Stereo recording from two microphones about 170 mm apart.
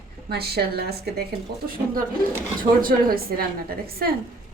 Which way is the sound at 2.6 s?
55° right (ahead or behind).